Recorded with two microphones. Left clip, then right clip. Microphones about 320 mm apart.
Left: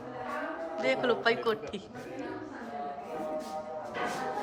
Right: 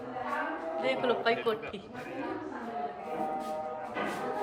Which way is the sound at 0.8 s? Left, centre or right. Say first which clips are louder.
Left 2 dB; centre.